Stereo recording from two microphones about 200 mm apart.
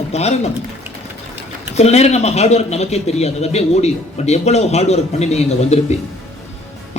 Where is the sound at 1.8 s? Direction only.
35° left (ahead or behind).